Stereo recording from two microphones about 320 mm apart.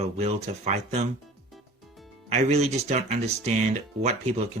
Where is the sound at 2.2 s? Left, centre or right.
Centre.